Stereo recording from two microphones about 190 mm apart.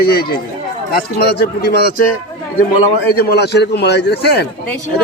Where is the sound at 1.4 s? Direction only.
60° left (ahead or behind).